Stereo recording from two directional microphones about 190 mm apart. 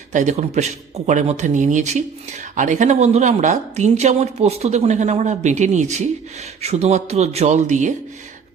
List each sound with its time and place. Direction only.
0.1 s speech: 40° right (ahead or behind)